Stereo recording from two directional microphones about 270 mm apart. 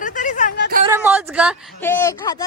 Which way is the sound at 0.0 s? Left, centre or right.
Left.